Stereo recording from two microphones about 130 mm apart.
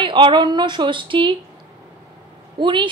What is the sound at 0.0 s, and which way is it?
Speech, 40° right (ahead or behind).